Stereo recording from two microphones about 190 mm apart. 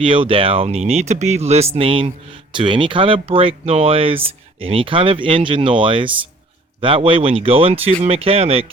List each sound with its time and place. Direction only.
0.0 s speech: 25° right (ahead or behind)